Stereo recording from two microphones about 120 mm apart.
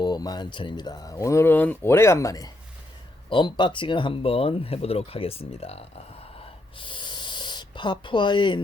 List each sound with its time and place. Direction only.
0.0 s speech: 35° left (ahead or behind)
3.2 s speech: 40° left (ahead or behind); by 5.8 s 55° left (ahead or behind)
6.7 s a sound: 45° left (ahead or behind)